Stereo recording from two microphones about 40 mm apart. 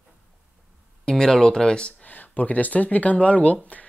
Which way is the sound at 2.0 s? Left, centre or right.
Left.